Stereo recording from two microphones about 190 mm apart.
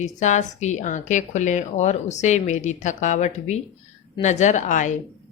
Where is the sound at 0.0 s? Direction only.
40° left (ahead or behind).